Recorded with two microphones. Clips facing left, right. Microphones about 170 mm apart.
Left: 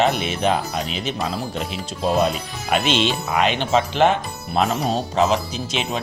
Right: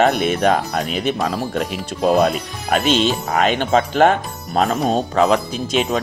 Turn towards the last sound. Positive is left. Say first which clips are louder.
# right 6 dB
turn(degrees=-50)  # may be behind; listen again after turning